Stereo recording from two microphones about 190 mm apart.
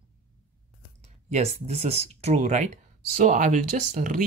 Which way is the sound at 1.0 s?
35° right (ahead or behind).